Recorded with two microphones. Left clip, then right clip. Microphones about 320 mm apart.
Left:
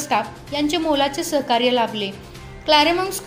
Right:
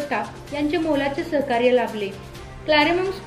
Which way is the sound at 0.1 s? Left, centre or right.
Left.